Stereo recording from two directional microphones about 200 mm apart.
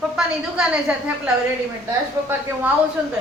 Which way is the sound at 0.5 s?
5° right (ahead or behind).